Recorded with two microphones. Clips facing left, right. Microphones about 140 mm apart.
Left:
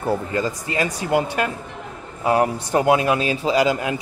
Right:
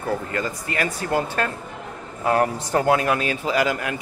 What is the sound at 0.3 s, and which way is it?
A man's voice, 20° left (ahead or behind).